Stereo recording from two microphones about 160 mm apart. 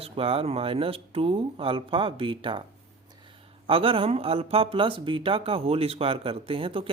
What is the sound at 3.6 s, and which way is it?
Speech, 35° right (ahead or behind).